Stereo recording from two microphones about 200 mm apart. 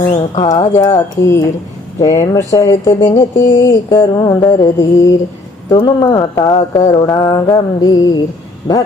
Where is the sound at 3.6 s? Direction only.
20° left (ahead or behind).